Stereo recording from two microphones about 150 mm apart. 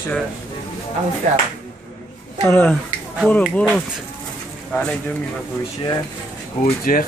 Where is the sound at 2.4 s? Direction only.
10° left (ahead or behind).